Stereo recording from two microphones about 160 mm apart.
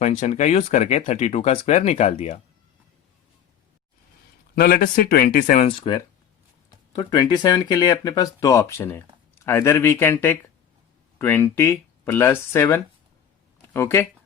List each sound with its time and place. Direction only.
0.0 s speech: 50° left (ahead or behind)
4.5 s speech: 70° left (ahead or behind)
5.5 s speech: 40° left (ahead or behind)
6.9 s speech: 25° left (ahead or behind)